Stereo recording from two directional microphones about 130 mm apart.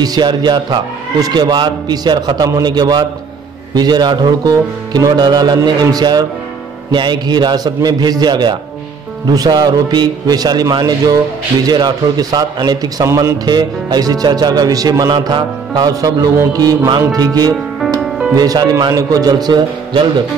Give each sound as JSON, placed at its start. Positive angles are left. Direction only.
{"t": 0.0, "sound": "a man's voice", "side_deg": -35}
{"t": 18.0, "sound": "music", "side_deg": 0}
{"t": 18.3, "sound": "a man's voice", "side_deg": -30}